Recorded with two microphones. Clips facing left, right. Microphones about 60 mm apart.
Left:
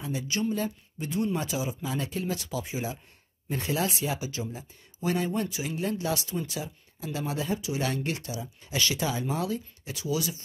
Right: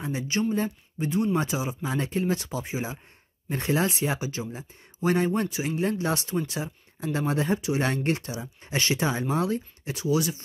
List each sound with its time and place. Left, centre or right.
0.0 s speech: right